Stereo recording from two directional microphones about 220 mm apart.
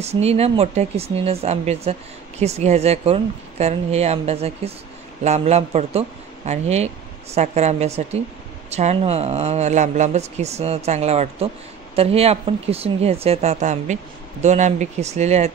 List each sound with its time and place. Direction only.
0.0 s speech: 30° right (ahead or behind)